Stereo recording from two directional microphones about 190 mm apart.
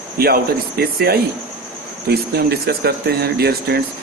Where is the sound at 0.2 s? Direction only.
55° right (ahead or behind).